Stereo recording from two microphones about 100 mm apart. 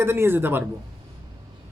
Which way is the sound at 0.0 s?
25° right (ahead or behind).